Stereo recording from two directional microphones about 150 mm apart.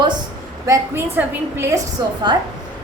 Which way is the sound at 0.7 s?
15° right (ahead or behind).